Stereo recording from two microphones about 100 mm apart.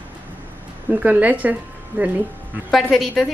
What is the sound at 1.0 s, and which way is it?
A woman's voice, 15° right (ahead or behind).